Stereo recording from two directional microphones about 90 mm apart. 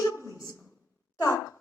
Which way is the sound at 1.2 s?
35° left (ahead or behind).